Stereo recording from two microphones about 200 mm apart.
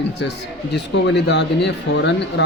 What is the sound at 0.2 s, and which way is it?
Speech, 60° left (ahead or behind).